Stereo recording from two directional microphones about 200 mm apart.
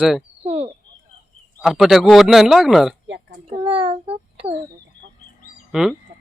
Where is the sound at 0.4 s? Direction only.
30° right (ahead or behind).